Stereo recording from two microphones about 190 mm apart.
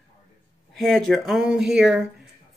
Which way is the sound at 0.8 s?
Centre (ahead or behind).